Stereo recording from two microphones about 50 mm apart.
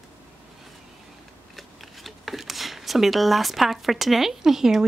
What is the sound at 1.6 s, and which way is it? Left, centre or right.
A woman's voice, centre.